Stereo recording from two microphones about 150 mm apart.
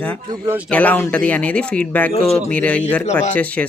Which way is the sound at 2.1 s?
40° left (ahead or behind).